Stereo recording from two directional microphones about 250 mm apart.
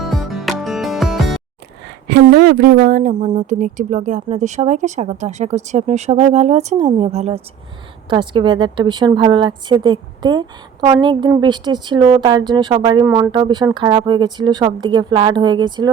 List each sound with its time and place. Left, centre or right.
0.0 s music: centre
2.0 s speech: right
3.2 s a woman's voice: right